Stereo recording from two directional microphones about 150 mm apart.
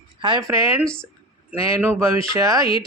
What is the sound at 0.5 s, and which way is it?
A child's voice, 20° right (ahead or behind).